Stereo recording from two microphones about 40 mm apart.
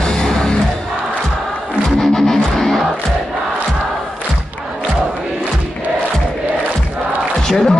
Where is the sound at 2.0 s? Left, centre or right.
Centre.